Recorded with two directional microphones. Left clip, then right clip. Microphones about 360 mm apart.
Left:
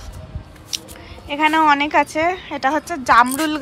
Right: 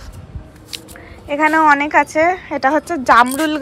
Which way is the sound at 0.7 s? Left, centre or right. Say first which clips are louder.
Left 3 dB; centre.